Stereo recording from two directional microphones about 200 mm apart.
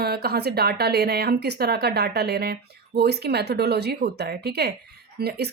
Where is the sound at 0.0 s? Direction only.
50° right (ahead or behind).